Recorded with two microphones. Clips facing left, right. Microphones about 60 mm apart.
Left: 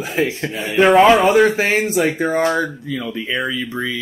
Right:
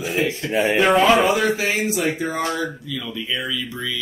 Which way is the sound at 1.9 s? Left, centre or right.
Left.